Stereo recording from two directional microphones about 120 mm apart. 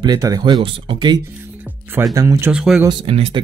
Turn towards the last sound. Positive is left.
turn(degrees=-50)  # may be behind; listen again after turning